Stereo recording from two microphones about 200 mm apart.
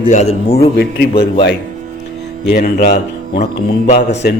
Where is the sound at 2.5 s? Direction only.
40° left (ahead or behind).